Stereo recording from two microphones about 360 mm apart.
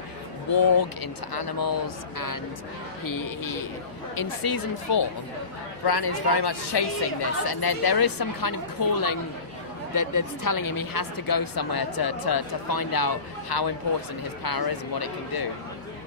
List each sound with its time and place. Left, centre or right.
0.5 s a woman's voice: left
4.1 s a woman's voice: left
5.9 s a woman's voice: left
14.4 s a woman's voice: left